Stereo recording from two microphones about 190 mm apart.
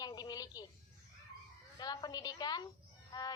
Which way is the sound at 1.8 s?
20° left (ahead or behind).